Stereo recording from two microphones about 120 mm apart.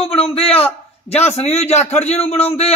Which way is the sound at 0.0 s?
55° left (ahead or behind).